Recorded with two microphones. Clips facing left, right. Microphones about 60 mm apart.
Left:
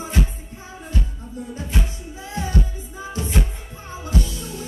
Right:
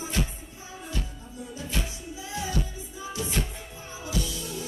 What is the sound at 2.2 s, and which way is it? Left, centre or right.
Music, left.